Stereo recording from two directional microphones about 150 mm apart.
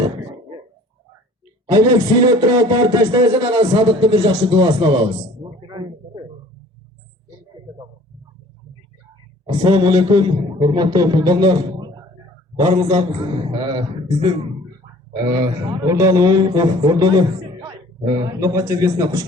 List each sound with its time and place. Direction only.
1.6 s a man's voice: 25° right (ahead or behind)
5.6 s a sound: 30° right (ahead or behind)
9.5 s a man's voice: 35° right (ahead or behind)
12.8 s a man's voice: 45° right (ahead or behind); by 14.3 s 30° right (ahead or behind)
15.4 s a man's voice: 25° right (ahead or behind)